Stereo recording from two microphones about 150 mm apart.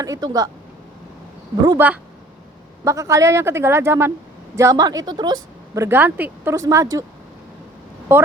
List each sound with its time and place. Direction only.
0.0 s speech: 25° right (ahead or behind)
1.8 s speech: 15° right (ahead or behind)
8.1 s speech: 15° right (ahead or behind)